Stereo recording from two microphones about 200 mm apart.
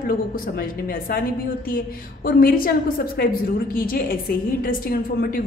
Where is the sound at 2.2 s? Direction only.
45° left (ahead or behind).